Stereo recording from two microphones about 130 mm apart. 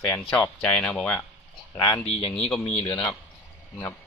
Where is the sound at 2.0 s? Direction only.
50° left (ahead or behind).